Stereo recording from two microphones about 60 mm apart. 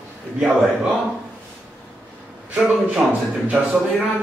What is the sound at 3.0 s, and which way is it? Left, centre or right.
Speech, centre.